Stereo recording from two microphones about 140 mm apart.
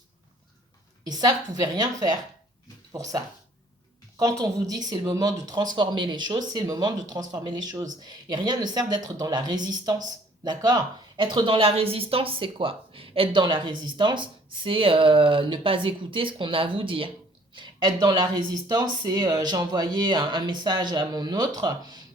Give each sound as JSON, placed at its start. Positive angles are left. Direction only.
{"t": 1.0, "sound": "speech", "side_deg": -30}